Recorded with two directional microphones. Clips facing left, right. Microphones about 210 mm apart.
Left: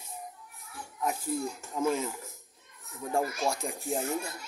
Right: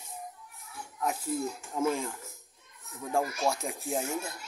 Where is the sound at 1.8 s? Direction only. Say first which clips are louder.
Left 1 dB; centre (ahead or behind).